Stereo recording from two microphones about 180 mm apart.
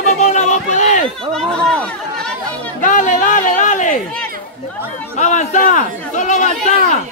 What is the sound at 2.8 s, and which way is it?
A man's voice, 45° left (ahead or behind).